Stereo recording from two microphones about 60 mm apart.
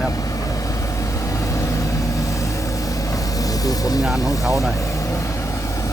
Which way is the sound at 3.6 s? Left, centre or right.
Left.